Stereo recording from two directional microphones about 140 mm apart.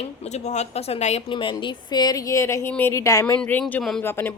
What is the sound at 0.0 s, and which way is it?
Speech, 50° left (ahead or behind).